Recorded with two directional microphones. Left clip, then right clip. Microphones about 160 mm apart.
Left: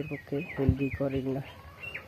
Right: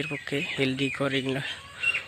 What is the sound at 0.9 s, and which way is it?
Speech, 25° right (ahead or behind).